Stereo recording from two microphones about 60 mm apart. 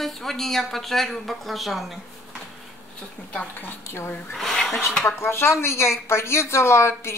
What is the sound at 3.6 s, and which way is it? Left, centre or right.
Speech, left.